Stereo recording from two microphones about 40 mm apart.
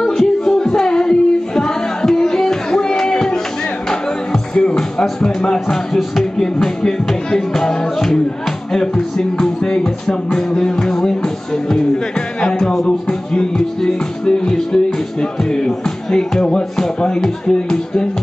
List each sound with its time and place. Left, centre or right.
0.0 s a sound: centre
4.3 s music: centre
12.4 s music: centre